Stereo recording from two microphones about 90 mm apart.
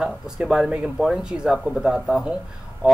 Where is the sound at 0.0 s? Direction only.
5° right (ahead or behind).